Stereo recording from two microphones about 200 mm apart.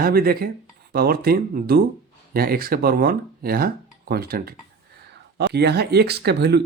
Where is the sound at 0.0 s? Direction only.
50° right (ahead or behind).